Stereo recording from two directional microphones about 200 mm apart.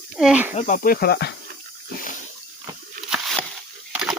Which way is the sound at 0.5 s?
35° left (ahead or behind).